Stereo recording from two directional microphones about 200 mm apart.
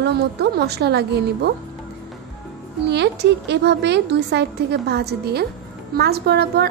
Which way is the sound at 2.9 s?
60° right (ahead or behind).